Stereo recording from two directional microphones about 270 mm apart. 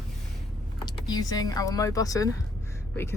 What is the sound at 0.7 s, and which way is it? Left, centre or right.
Speech, centre.